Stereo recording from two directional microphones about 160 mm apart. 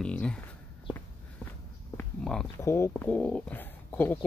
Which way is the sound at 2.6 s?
15° left (ahead or behind).